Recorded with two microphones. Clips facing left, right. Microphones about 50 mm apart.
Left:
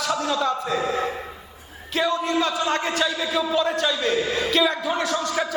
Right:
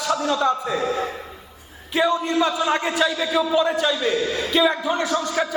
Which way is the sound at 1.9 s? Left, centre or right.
Centre.